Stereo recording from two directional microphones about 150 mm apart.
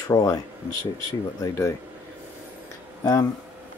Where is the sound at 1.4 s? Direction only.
20° left (ahead or behind).